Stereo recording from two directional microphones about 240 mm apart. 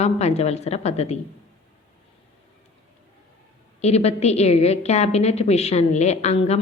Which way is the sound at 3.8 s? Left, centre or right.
Left.